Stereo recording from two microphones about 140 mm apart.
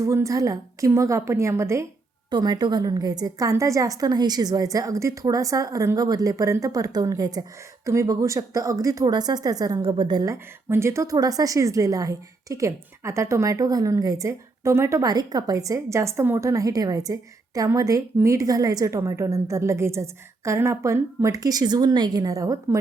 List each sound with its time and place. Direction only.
0.0 s a woman's voice: 20° right (ahead or behind)
10.3 s a woman's voice: 20° right (ahead or behind)